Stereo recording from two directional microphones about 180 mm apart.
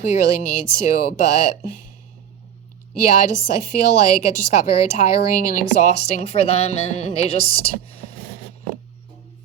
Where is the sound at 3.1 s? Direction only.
45° left (ahead or behind).